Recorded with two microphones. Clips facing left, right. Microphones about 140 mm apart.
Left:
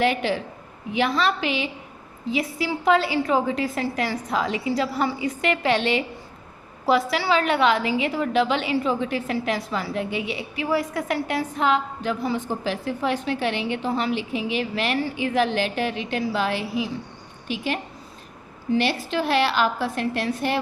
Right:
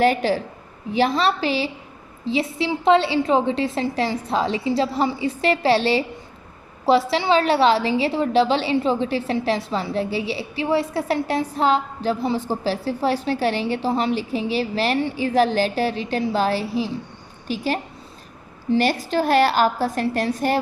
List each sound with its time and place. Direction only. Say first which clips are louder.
0.0 s a woman's voice: right 4 dB; 40° right (ahead or behind)